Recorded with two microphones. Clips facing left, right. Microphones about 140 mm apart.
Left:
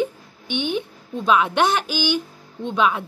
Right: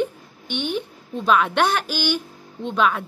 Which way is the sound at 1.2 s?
5° left (ahead or behind).